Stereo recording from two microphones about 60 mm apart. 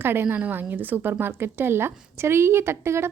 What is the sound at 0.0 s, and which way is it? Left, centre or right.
Speech, right.